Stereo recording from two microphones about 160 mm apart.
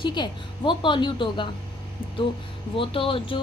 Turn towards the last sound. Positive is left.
turn(degrees=35)  # may be behind; listen again after turning